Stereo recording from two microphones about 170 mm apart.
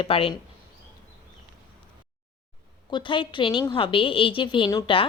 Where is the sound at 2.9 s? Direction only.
30° left (ahead or behind).